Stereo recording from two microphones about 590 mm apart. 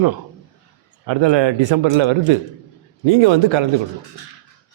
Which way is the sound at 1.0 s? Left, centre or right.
Right.